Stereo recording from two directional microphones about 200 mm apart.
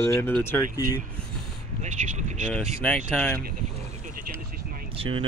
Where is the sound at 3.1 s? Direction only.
5° left (ahead or behind).